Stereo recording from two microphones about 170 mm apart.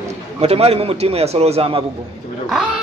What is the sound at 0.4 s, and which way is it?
A man's voice, 35° right (ahead or behind).